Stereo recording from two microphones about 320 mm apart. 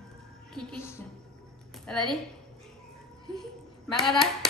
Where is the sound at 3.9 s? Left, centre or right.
Centre.